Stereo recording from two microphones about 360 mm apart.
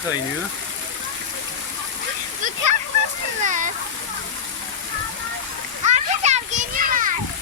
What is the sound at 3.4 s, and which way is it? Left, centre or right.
Speech, right.